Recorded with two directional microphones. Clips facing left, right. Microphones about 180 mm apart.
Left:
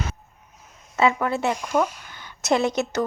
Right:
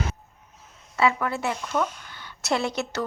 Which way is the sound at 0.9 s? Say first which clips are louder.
Left 3 dB; 25° left (ahead or behind).